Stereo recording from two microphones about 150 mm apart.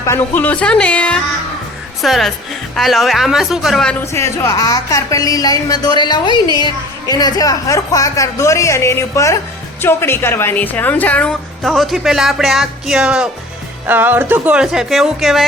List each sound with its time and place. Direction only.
0.0 s a woman's voice: 15° left (ahead or behind)
4.0 s a woman's voice: 20° left (ahead or behind); by 15.4 s centre (ahead or behind)